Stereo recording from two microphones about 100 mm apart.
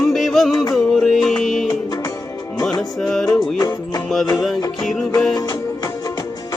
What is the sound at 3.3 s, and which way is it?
Music, 40° left (ahead or behind).